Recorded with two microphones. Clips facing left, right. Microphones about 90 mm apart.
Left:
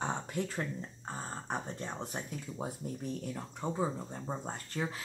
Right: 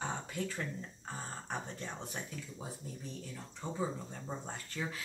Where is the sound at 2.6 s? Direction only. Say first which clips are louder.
Left 8 dB; 55° left (ahead or behind).